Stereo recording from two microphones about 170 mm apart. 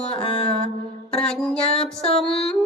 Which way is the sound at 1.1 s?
5° left (ahead or behind).